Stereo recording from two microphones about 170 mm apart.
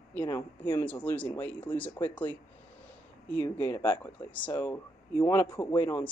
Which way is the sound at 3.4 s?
15° left (ahead or behind).